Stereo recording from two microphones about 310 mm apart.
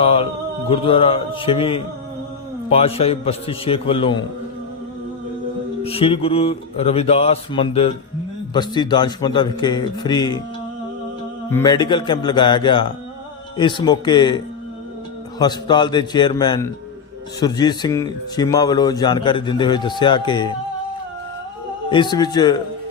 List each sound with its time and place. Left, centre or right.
0.0 s chant: centre
0.7 s speech: centre
5.8 s speech: centre
11.5 s speech: centre
21.8 s speech: centre